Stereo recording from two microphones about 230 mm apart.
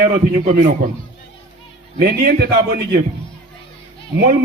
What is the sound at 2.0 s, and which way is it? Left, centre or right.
Speech, right.